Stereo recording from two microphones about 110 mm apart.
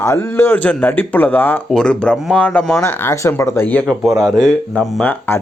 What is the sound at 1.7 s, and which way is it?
Speech, 5° left (ahead or behind).